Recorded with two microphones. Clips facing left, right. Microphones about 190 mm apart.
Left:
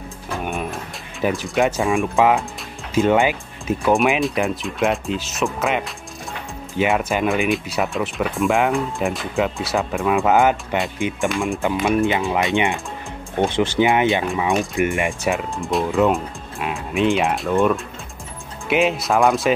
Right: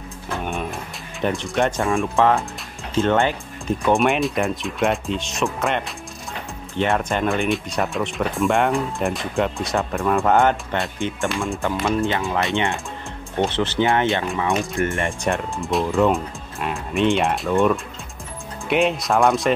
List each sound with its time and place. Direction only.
0.5 s a sound: centre (ahead or behind)
1.2 s speech: 5° left (ahead or behind)
2.0 s speech: 15° left (ahead or behind)
13.5 s speech: 15° left (ahead or behind)
15.3 s speech: centre (ahead or behind)